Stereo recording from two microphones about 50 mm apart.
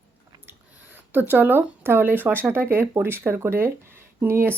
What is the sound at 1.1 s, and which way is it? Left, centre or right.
Speech, right.